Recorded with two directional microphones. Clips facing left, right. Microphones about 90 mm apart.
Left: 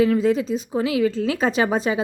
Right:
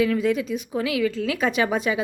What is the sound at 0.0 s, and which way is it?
A woman's voice, 30° left (ahead or behind).